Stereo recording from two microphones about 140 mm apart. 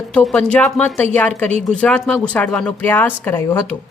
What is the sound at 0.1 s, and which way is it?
A woman's voice, 10° left (ahead or behind).